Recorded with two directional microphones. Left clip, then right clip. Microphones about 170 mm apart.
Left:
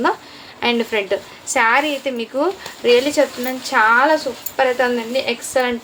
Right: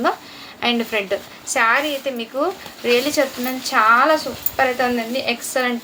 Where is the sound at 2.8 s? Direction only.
15° left (ahead or behind).